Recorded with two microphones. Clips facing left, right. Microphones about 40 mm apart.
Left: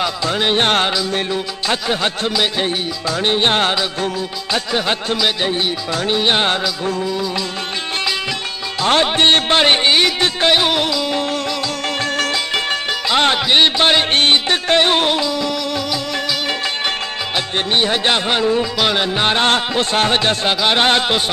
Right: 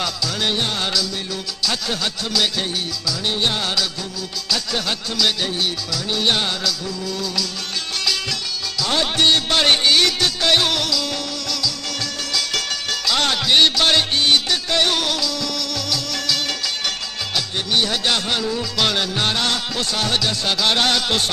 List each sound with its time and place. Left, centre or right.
0.2 s music: left
0.6 s music: left
1.3 s music: left
4.7 s music: left
9.0 s music: left
11.6 s music: left
17.7 s music: left